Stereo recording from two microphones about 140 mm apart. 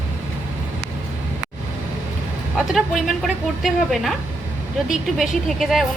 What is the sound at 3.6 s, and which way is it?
A woman's voice, centre (ahead or behind).